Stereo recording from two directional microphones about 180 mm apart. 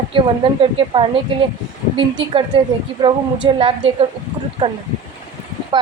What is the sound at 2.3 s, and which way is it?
A woman's voice, 30° right (ahead or behind).